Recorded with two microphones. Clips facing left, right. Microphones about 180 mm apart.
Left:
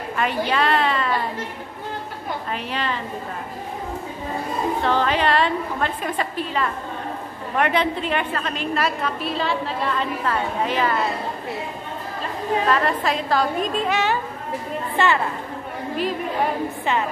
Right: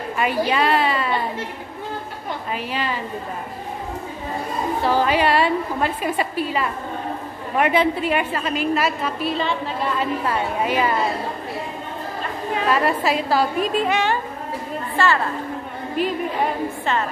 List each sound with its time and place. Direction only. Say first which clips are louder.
0.2 s a woman's voice: right 2 dB; 5° right (ahead or behind)
2.5 s a woman's voice: right 2 dB; 5° right (ahead or behind)
4.8 s a woman's voice: right 3 dB; 10° right (ahead or behind)
10.2 s a woman's voice: right 1 dB; 10° right (ahead or behind)
12.6 s a woman's voice: right 4 dB; 10° right (ahead or behind)
15.0 s a woman's voice: even; 20° left (ahead or behind)